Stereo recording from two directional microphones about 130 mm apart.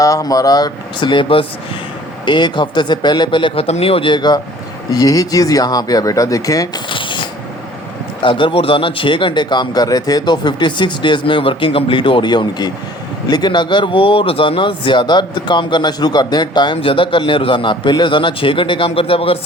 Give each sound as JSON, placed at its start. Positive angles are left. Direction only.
{"t": 0.0, "sound": "a man's voice", "side_deg": 25}
{"t": 6.9, "sound": "a sound", "side_deg": 40}
{"t": 8.2, "sound": "a man's voice", "side_deg": 40}